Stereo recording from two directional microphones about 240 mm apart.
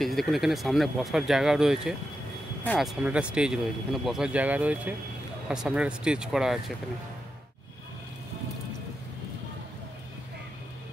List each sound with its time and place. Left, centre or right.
0.0 s speech: centre